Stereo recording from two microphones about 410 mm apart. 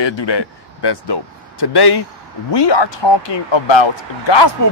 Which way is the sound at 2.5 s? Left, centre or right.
Left.